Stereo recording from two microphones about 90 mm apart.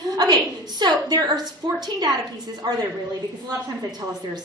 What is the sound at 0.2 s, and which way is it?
A woman's voice, 50° right (ahead or behind).